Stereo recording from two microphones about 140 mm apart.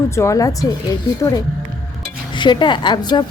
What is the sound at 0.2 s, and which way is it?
Speech, 25° left (ahead or behind).